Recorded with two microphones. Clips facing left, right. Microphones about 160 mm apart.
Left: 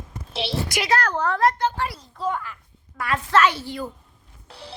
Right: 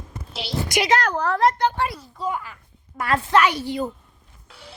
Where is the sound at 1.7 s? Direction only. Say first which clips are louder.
Right 3 dB; 20° right (ahead or behind).